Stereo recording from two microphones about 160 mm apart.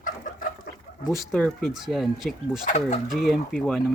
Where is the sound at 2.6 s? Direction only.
50° left (ahead or behind).